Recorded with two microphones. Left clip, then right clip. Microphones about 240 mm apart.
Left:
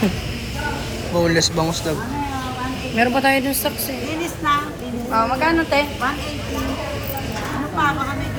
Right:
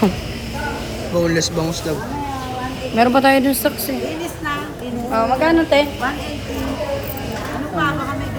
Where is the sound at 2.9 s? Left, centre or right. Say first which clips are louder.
Right 4 dB; right.